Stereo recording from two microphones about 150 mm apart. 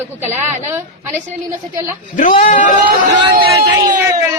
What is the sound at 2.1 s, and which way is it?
Speech, 60° left (ahead or behind).